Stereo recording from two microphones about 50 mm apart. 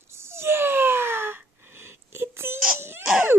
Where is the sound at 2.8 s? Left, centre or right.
Right.